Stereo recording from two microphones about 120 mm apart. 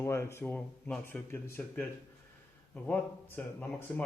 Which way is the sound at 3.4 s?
10° left (ahead or behind).